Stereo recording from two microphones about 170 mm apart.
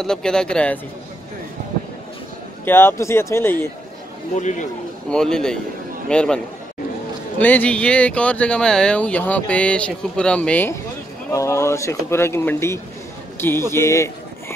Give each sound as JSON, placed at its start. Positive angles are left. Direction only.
{"t": 0.0, "sound": "speech", "side_deg": 5}
{"t": 2.6, "sound": "speech", "side_deg": 10}
{"t": 4.4, "sound": "a man's voice", "side_deg": 45}
{"t": 5.1, "sound": "speech", "side_deg": 5}